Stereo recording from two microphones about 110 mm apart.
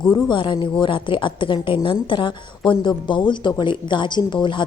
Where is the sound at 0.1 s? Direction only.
45° left (ahead or behind).